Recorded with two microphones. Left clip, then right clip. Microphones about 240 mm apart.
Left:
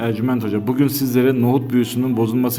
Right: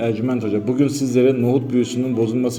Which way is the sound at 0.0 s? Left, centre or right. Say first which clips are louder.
Even; left.